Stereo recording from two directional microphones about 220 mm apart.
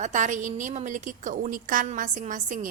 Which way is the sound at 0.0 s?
35° right (ahead or behind).